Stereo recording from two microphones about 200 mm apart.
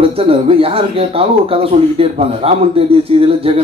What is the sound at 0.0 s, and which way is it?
Speech, 30° right (ahead or behind).